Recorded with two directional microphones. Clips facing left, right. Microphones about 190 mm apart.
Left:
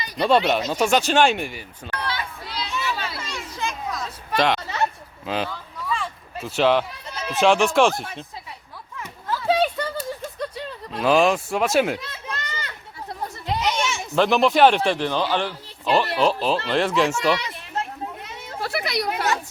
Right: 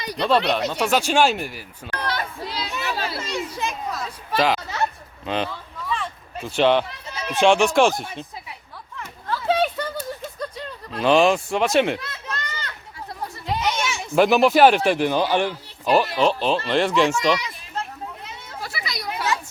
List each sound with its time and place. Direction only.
0.2 s speech: centre (ahead or behind)
2.0 s children playing: 45° right (ahead or behind)
2.9 s children playing: 35° right (ahead or behind)
3.8 s a sound: 5° right (ahead or behind)
5.2 s speech: 5° left (ahead or behind)
9.0 s a sound: 5° left (ahead or behind)
10.9 s speech: centre (ahead or behind)
13.5 s speech: 5° right (ahead or behind)
16.1 s speech: centre (ahead or behind)
18.6 s a sound: 60° left (ahead or behind)